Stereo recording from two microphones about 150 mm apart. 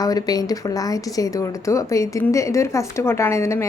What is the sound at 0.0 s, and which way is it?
Speech, 25° left (ahead or behind).